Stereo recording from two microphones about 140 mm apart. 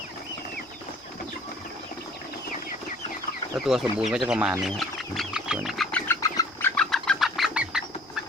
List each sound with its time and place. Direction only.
3.6 s speech: centre (ahead or behind)
4.8 s wild animals: centre (ahead or behind)
6.1 s duck: 20° left (ahead or behind)
6.7 s bird: 5° left (ahead or behind)